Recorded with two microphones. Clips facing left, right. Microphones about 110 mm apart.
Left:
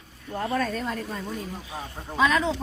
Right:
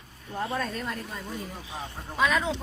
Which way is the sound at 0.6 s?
Centre (ahead or behind).